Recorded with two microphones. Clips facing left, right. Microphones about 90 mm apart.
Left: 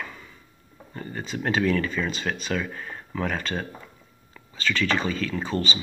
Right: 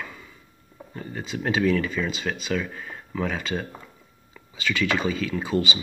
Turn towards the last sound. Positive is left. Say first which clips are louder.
# right 2 dB
turn(degrees=-10)  # may be behind; listen again after turning